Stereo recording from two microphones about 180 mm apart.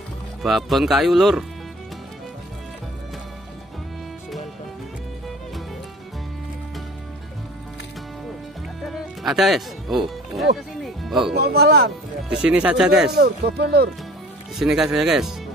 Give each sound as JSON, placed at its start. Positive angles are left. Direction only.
{"t": 0.4, "sound": "speech", "side_deg": 0}
{"t": 8.8, "sound": "music", "side_deg": 0}
{"t": 11.3, "sound": "speech", "side_deg": -60}
{"t": 12.3, "sound": "speech", "side_deg": -5}
{"t": 13.1, "sound": "speech", "side_deg": -60}
{"t": 14.6, "sound": "speech", "side_deg": -5}